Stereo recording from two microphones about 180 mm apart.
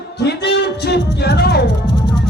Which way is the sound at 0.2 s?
65° left (ahead or behind).